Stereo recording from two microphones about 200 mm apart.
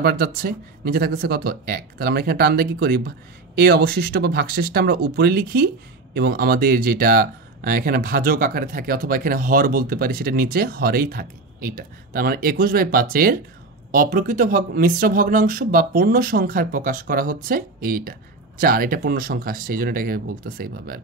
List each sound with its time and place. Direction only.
0.0 s speech: 50° right (ahead or behind)